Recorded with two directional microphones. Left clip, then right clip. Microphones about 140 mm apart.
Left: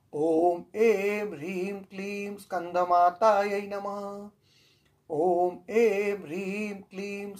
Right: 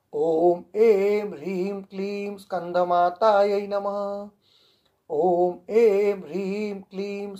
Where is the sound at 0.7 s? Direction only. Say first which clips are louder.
Right 6 dB; 35° right (ahead or behind).